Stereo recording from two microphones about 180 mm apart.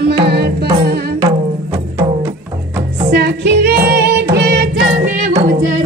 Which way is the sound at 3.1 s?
65° right (ahead or behind).